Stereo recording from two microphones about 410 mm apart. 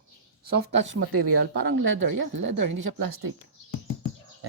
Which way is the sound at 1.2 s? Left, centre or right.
Right.